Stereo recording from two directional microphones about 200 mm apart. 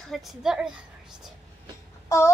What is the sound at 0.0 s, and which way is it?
A woman's voice, centre (ahead or behind).